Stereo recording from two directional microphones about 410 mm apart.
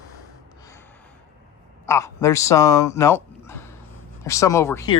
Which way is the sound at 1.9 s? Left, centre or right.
Centre.